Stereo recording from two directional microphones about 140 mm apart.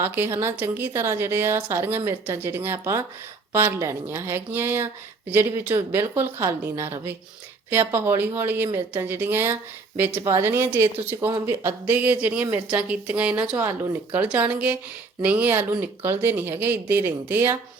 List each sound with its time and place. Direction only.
0.0 s a woman's voice: 15° right (ahead or behind)